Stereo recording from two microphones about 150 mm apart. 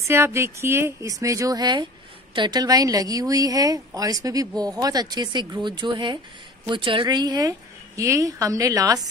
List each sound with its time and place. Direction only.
0.0 s speech: 15° right (ahead or behind)